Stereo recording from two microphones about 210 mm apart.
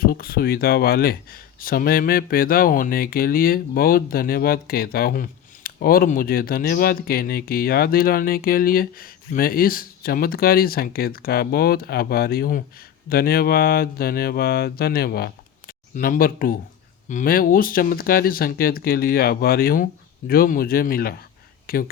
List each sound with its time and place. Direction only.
0.0 s speech: 45° left (ahead or behind)